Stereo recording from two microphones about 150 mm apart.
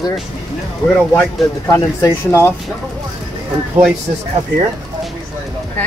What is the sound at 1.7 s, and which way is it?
Speech, 25° left (ahead or behind).